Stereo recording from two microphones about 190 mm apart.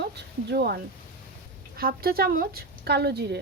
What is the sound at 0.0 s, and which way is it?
Speech, 60° right (ahead or behind).